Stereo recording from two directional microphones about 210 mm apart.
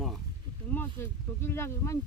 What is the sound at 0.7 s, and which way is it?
Speech, 10° left (ahead or behind).